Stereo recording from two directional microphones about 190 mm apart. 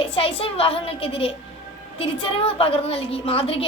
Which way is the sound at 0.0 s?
30° left (ahead or behind).